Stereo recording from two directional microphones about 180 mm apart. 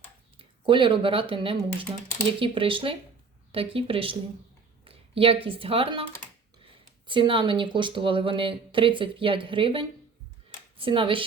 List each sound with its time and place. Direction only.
0.3 s speech: 30° right (ahead or behind)